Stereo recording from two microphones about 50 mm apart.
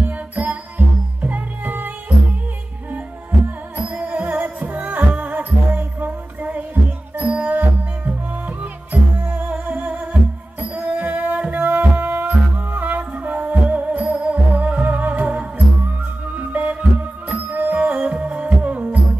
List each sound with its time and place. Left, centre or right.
0.0 s music: right
2.9 s music: right